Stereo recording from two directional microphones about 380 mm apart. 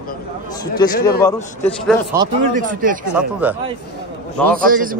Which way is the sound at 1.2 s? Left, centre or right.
Centre.